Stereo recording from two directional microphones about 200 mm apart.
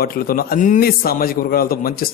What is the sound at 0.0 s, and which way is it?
A man's voice, 45° left (ahead or behind).